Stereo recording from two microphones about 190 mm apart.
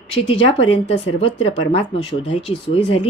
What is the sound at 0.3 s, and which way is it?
Speech, 30° left (ahead or behind).